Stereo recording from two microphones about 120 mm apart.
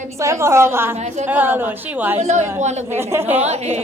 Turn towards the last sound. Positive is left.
turn(degrees=-65)  # may be behind; listen again after turning